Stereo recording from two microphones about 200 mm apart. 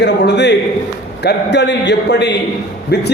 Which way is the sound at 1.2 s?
60° left (ahead or behind).